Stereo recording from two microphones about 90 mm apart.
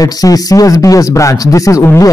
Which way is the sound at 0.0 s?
45° left (ahead or behind).